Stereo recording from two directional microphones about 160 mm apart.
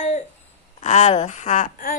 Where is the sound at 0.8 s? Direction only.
45° left (ahead or behind).